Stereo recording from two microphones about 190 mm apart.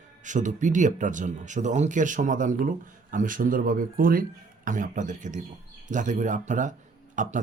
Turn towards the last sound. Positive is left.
turn(degrees=-40)  # may be behind; listen again after turning